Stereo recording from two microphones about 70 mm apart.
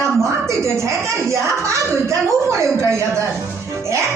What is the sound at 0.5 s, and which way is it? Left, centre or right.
A woman's voice, right.